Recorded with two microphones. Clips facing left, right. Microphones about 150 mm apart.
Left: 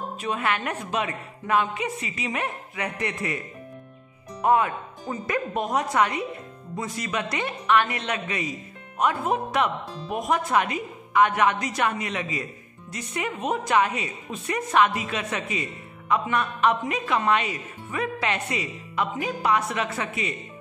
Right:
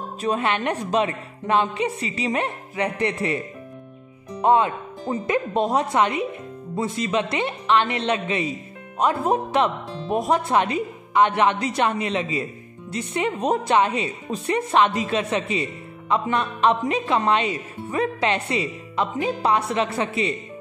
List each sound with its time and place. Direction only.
0.2 s a woman's voice: 30° right (ahead or behind)
4.4 s a woman's voice: 25° right (ahead or behind)